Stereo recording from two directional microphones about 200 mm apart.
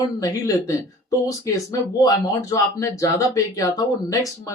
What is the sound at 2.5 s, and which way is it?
Speech, 15° left (ahead or behind).